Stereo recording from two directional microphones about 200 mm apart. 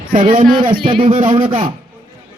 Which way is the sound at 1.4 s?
25° right (ahead or behind).